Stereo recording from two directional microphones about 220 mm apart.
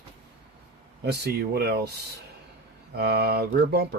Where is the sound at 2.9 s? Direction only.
45° right (ahead or behind).